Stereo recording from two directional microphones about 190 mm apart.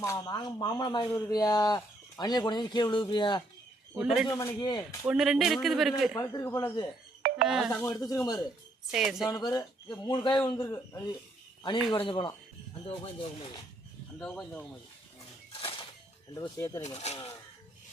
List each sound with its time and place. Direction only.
0.0 s speech: 20° left (ahead or behind)
3.9 s speech: 5° right (ahead or behind)
4.3 s speech: 20° left (ahead or behind)
5.0 s speech: 5° right (ahead or behind)
6.1 s speech: 15° left (ahead or behind)
7.2 s music: 45° right (ahead or behind)
7.4 s speech: 5° right (ahead or behind)
7.7 s speech: 15° left (ahead or behind)
8.9 s speech: centre (ahead or behind)
9.3 s speech: 20° left (ahead or behind)
14.2 s speech: 5° left (ahead or behind)
15.6 s a sound: 25° left (ahead or behind)
16.3 s speech: 20° left (ahead or behind)
16.8 s speech: 35° left (ahead or behind)